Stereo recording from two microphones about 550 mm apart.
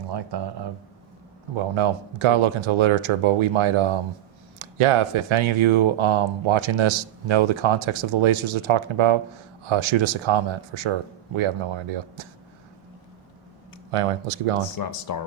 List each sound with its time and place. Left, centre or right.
0.1 s speech: right
1.7 s speech: right
13.9 s speech: right
14.8 s speech: left